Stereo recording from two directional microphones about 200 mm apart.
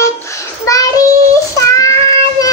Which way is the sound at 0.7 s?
15° left (ahead or behind).